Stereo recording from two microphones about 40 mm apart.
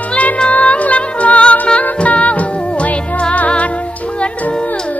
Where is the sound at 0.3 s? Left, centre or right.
Left.